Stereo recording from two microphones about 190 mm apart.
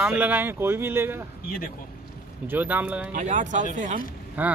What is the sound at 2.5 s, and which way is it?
Speech, 10° right (ahead or behind).